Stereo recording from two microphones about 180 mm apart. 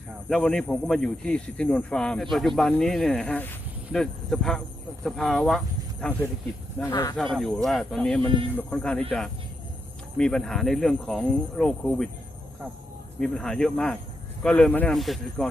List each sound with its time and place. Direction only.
0.3 s a man's voice: 5° left (ahead or behind)
6.9 s speech: 20° left (ahead or behind)
7.3 s a man's voice: centre (ahead or behind)
13.1 s a man's voice: 5° left (ahead or behind)